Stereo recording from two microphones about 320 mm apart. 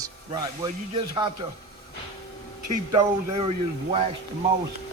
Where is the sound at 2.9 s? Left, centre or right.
Centre.